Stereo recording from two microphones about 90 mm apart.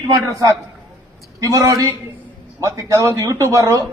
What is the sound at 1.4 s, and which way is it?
A man's voice, 40° right (ahead or behind).